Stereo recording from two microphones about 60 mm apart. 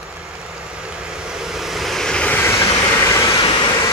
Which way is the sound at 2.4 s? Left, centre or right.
Left.